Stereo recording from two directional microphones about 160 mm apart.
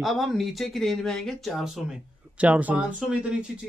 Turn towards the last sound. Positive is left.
turn(degrees=-5)  # may be behind; listen again after turning